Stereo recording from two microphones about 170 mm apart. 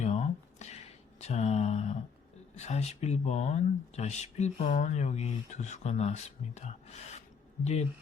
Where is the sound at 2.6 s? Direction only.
40° left (ahead or behind).